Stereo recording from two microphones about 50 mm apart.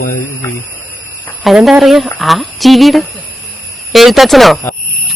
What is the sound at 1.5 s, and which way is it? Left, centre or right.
Speech, centre.